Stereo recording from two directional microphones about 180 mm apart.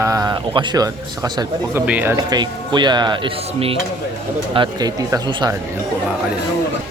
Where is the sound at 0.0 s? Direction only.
20° right (ahead or behind).